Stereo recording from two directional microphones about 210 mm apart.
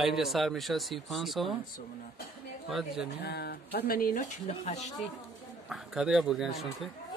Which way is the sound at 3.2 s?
50° left (ahead or behind).